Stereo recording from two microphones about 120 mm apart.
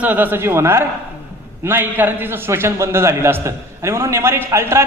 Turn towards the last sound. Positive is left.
turn(degrees=-20)  # may be behind; listen again after turning